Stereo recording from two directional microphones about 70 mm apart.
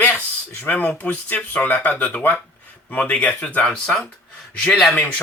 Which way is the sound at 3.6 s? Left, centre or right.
Centre.